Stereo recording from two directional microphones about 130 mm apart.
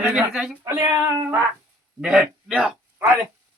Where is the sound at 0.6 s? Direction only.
25° right (ahead or behind).